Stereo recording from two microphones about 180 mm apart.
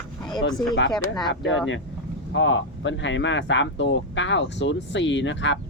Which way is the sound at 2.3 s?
90° left.